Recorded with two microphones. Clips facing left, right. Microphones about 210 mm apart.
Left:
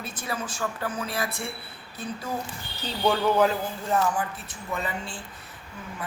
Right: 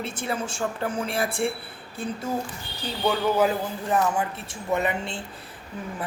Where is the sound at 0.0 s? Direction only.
25° right (ahead or behind).